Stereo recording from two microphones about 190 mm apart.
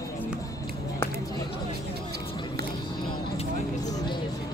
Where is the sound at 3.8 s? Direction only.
20° left (ahead or behind).